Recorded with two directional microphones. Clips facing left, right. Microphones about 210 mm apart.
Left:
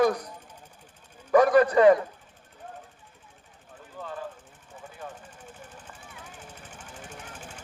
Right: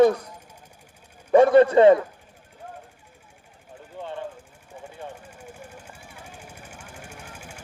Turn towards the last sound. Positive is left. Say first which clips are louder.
# right 1 dB
turn(degrees=-10)  # may be behind; listen again after turning